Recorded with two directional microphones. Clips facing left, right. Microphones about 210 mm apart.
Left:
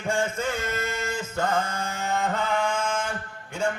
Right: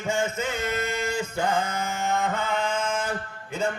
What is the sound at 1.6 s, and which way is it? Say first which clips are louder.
Mantra: right 2 dB; 30° left (ahead or behind).